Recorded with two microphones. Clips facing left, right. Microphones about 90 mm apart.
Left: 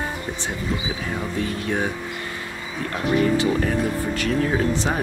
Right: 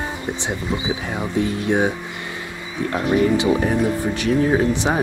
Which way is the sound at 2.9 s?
20° right (ahead or behind).